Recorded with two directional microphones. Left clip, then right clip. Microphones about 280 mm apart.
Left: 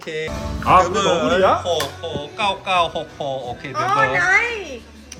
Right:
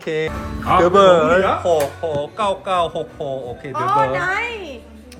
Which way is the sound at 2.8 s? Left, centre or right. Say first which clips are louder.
Right 1 dB; left.